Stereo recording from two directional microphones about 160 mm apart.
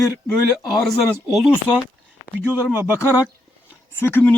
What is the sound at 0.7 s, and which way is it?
Speech, centre (ahead or behind).